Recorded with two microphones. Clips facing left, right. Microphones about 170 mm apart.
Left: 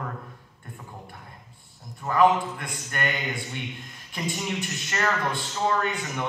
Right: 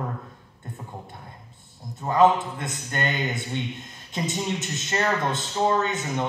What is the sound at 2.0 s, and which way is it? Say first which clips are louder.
A man's voice: right 1 dB; 25° right (ahead or behind).